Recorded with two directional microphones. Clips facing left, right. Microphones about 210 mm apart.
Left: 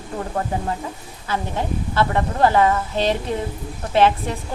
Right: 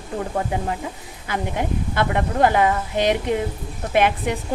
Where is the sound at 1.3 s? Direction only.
15° right (ahead or behind).